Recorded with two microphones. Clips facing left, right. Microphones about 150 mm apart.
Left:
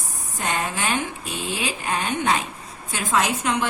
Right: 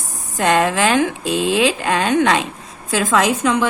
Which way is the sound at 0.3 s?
90° right.